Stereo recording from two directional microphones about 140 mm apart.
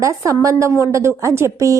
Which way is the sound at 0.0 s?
20° right (ahead or behind).